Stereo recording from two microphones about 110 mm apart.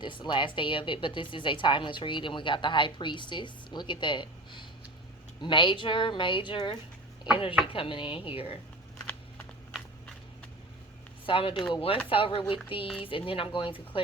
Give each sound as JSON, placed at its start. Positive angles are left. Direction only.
{"t": 0.0, "sound": "a woman's voice", "side_deg": 45}
{"t": 11.3, "sound": "a woman's voice", "side_deg": 50}